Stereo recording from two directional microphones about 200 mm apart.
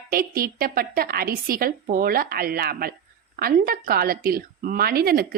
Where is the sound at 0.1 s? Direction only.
45° right (ahead or behind).